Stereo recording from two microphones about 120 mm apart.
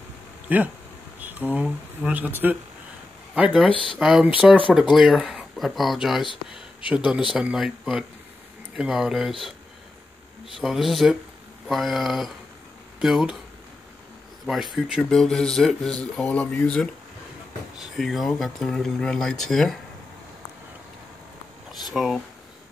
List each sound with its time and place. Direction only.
0.5 s speech: 15° right (ahead or behind)
3.6 s speech: 45° left (ahead or behind)
4.0 s speech: 5° right (ahead or behind)
10.4 s speech: centre (ahead or behind)
14.4 s speech: centre (ahead or behind)
21.8 s speech: centre (ahead or behind)